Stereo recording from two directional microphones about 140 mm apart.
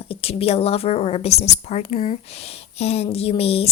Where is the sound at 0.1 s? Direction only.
45° left (ahead or behind).